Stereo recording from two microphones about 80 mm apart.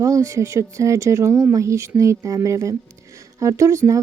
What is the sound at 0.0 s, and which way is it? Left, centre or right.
Speech, right.